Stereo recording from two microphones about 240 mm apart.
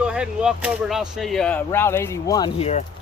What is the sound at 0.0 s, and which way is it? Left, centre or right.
Speech, centre.